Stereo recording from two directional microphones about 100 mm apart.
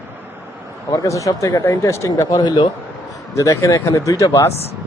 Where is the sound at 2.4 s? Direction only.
45° left (ahead or behind).